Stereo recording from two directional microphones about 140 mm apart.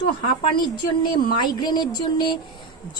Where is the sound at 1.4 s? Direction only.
30° left (ahead or behind).